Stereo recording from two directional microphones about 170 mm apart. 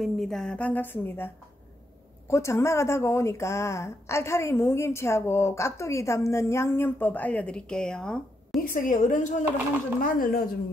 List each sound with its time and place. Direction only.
0.0 s speech: centre (ahead or behind)
8.5 s a woman's voice: 55° left (ahead or behind)